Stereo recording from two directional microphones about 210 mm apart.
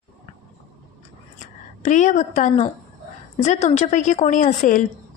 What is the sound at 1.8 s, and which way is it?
A woman's voice, 35° left (ahead or behind).